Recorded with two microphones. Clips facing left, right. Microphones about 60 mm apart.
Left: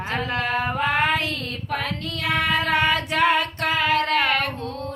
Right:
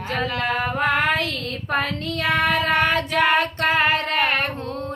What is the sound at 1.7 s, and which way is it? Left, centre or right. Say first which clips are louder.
Child singing: right 4 dB; right.